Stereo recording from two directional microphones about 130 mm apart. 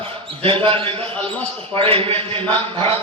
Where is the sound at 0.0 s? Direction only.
45° right (ahead or behind).